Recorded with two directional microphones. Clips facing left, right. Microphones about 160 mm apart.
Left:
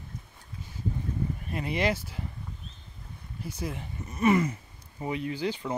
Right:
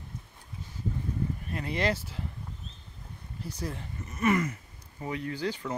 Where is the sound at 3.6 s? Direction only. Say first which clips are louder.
Left 2 dB; 15° left (ahead or behind).